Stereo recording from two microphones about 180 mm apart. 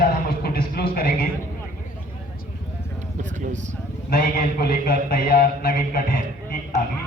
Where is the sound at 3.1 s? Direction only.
45° right (ahead or behind).